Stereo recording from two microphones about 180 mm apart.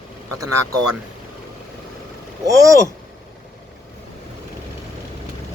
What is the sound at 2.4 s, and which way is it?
Speech, 15° right (ahead or behind).